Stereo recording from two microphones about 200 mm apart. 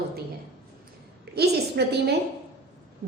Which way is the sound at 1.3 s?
55° right (ahead or behind).